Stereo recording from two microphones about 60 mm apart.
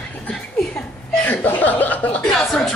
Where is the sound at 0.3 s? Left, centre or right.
Centre.